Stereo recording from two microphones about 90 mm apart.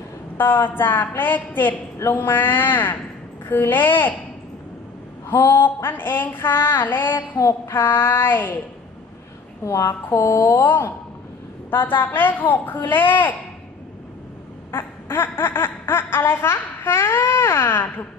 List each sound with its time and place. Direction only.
0.4 s speech: 20° left (ahead or behind)
5.3 s speech: 20° left (ahead or behind)
9.7 s speech: 30° left (ahead or behind)
10.6 s speech: 20° left (ahead or behind)
14.7 s speech: 25° left (ahead or behind)